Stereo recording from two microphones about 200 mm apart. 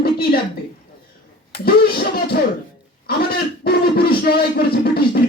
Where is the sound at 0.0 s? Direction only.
50° left (ahead or behind).